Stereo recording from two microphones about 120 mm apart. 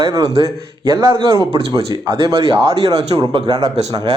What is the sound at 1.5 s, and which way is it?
Speech, 50° right (ahead or behind).